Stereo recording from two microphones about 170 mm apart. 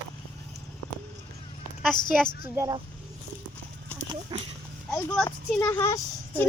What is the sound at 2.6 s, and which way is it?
Speech, 25° right (ahead or behind).